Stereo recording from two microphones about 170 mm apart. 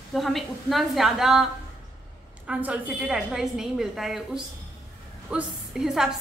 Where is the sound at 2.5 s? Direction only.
10° right (ahead or behind).